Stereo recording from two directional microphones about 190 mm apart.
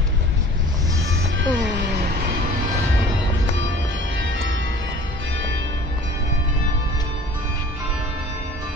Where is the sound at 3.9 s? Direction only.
80° right.